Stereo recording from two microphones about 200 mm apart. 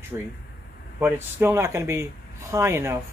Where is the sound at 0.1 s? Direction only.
15° right (ahead or behind).